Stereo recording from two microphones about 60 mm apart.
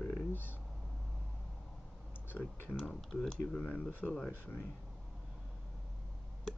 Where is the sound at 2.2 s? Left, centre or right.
Left.